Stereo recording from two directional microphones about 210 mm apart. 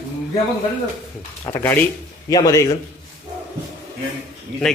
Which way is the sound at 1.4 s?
10° left (ahead or behind).